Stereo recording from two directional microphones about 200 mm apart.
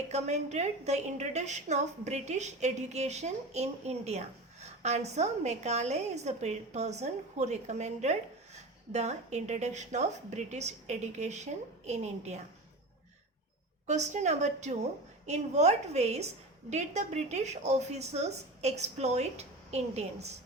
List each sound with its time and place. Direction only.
0.1 s a woman's voice: 35° right (ahead or behind)
13.8 s a woman's voice: 35° right (ahead or behind)